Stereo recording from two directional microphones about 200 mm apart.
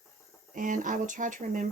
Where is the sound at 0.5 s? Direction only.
40° right (ahead or behind).